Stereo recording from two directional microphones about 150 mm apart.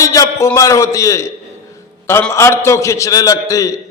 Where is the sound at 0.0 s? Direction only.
20° left (ahead or behind).